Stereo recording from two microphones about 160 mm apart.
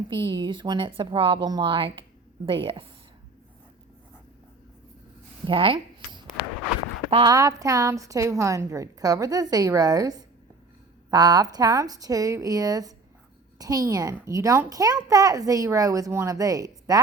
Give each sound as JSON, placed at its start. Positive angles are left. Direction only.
{"t": 0.1, "sound": "speech", "side_deg": -30}
{"t": 5.5, "sound": "a sound", "side_deg": -35}
{"t": 7.1, "sound": "a child's voice", "side_deg": -25}